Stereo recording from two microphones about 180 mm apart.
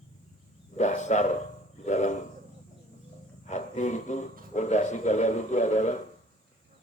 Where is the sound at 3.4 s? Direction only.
40° left (ahead or behind).